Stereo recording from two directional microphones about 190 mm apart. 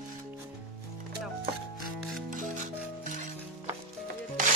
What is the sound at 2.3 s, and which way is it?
Music, 45° right (ahead or behind).